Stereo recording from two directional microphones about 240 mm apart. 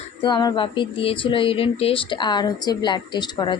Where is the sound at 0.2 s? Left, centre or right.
Centre.